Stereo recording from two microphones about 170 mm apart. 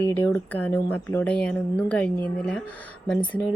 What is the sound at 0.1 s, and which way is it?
Speech, 10° left (ahead or behind).